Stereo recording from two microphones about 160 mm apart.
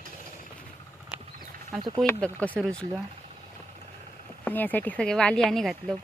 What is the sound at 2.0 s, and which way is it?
Speech, 10° left (ahead or behind).